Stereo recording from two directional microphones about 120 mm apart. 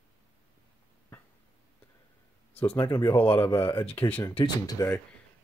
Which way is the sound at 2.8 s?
35° left (ahead or behind).